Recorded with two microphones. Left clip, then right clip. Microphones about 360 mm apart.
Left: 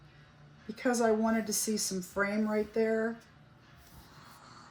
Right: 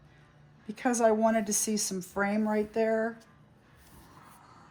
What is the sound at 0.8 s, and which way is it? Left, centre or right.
Speech, right.